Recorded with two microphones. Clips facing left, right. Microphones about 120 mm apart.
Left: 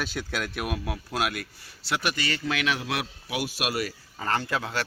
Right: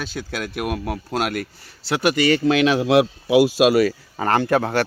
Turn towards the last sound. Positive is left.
turn(degrees=-60)  # may be behind; listen again after turning